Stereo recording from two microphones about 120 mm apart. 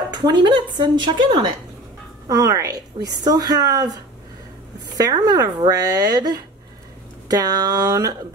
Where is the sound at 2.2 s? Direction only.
30° right (ahead or behind).